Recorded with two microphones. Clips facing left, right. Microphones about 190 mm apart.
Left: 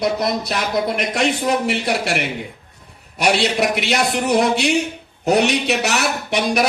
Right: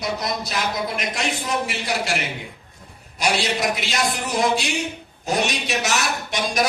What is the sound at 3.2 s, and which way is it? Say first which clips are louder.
A man's voice: left 5 dB; 65° left (ahead or behind).